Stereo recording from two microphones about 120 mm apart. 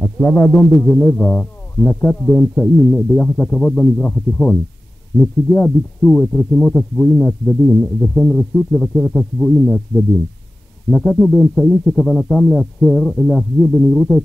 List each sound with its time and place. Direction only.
0.0 s speech: 10° left (ahead or behind)
2.3 s speech: 10° left (ahead or behind)